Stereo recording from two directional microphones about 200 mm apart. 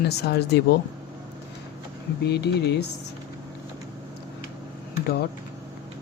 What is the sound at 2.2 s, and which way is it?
Speech, 55° left (ahead or behind).